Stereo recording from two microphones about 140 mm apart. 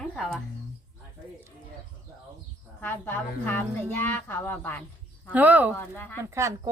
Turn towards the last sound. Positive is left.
turn(degrees=-20)  # may be behind; listen again after turning